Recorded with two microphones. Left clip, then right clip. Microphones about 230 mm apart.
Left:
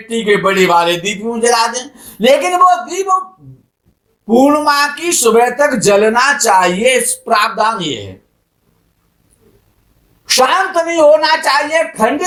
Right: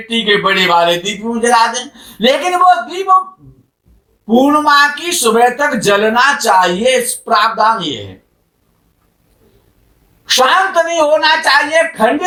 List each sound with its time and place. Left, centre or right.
0.1 s speech: left
4.3 s speech: left
10.2 s speech: left